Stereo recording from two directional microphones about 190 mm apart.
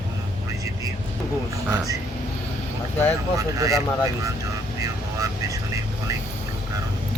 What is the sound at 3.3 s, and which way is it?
Speech, 15° right (ahead or behind).